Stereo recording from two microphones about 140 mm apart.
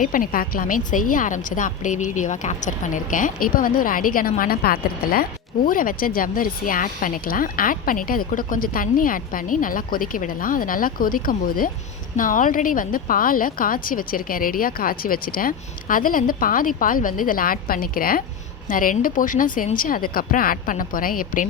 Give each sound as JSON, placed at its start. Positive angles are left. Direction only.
{"t": 0.0, "sound": "a woman's voice", "side_deg": 80}
{"t": 5.6, "sound": "speech", "side_deg": 80}
{"t": 12.1, "sound": "speech", "side_deg": 75}
{"t": 18.7, "sound": "a woman's voice", "side_deg": 80}